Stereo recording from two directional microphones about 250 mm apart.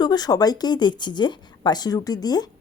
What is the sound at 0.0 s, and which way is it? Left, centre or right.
Speech, centre.